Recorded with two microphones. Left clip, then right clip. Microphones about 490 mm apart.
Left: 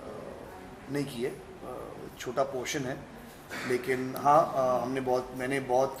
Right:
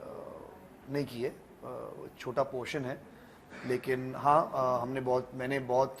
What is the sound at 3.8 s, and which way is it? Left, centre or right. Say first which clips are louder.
Speech: left 2 dB; right.